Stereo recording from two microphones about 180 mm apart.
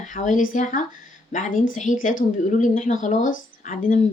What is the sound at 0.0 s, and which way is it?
Speech, 40° left (ahead or behind).